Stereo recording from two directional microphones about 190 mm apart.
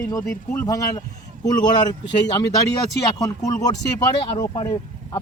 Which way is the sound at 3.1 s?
20° left (ahead or behind).